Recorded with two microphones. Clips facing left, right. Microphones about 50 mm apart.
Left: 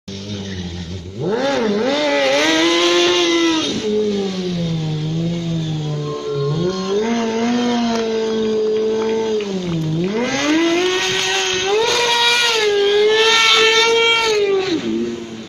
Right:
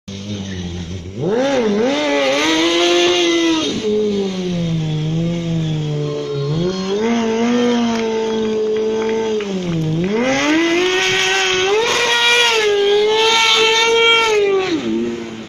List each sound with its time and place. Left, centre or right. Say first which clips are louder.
1.4 s vehicle: right 2 dB; centre
7.0 s a sound: right 3 dB; right
10.2 s vehicle: right 1 dB; right
12.7 s civil defense siren: left 3 dB; centre
13.8 s a sound: right 2 dB; right
14.2 s cat: right 2 dB; right